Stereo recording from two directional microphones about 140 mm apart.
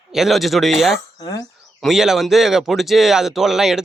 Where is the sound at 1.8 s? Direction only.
Centre (ahead or behind).